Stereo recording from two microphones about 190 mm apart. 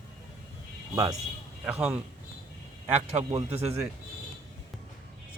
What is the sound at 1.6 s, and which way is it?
Speech, 5° right (ahead or behind).